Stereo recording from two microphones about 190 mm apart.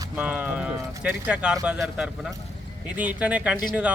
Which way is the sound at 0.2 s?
5° right (ahead or behind).